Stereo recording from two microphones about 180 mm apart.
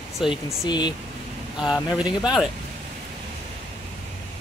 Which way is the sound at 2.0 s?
25° left (ahead or behind).